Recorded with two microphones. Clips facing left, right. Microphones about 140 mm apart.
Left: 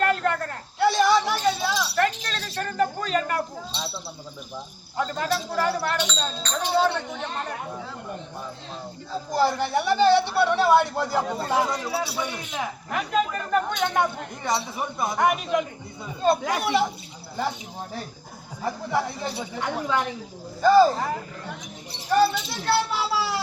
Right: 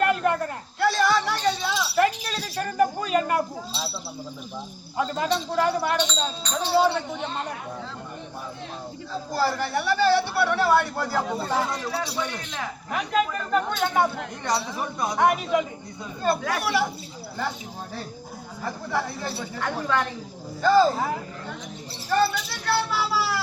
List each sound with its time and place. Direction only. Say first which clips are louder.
0.0 s a sound: right 1 dB; 15° right (ahead or behind)
0.8 s a sound: left 2 dB; 15° left (ahead or behind)
1.7 s a sound: right 2 dB; 5° right (ahead or behind)
4.9 s speech: right 1 dB; 10° right (ahead or behind)
9.3 s a man's voice: left 3 dB; 20° left (ahead or behind)
11.2 s speech: left 1 dB; centre (ahead or behind)
11.4 s speech: left 2 dB; 15° left (ahead or behind)
13.8 s speech: right 3 dB; 5° right (ahead or behind)
14.8 s speech: right 2 dB; 5° left (ahead or behind)
16.2 s a man's voice: left 2 dB; 20° left (ahead or behind)
18.6 s speech: left 2 dB; 20° left (ahead or behind)
20.9 s speech: right 1 dB; centre (ahead or behind)
21.9 s a sound: left 2 dB; 15° left (ahead or behind)